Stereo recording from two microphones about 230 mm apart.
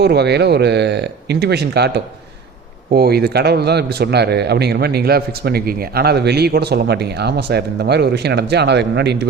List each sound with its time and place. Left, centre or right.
0.0 s speech: right
2.9 s speech: right